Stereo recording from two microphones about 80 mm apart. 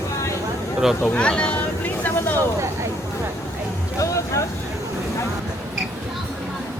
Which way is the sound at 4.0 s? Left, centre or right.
Left.